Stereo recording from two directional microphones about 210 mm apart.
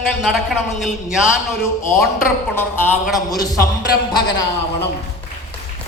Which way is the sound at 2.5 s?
10° left (ahead or behind).